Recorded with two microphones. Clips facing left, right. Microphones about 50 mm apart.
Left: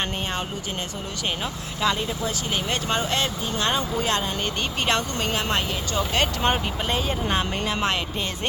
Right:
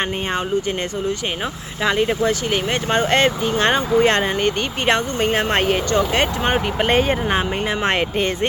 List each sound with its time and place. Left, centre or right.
1.8 s speech: right
7.3 s speech: right